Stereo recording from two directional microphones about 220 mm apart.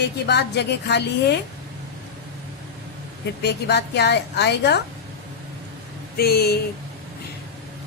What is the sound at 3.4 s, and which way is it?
A woman's voice, 50° left (ahead or behind).